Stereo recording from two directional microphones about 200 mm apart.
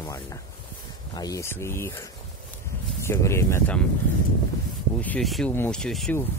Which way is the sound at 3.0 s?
15° left (ahead or behind).